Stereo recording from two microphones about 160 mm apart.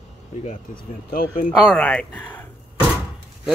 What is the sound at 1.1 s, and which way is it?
Speech, 60° left (ahead or behind).